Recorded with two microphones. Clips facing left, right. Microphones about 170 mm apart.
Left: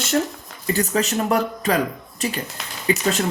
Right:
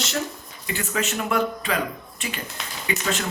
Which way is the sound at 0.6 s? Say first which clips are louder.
Left 6 dB; 40° left (ahead or behind).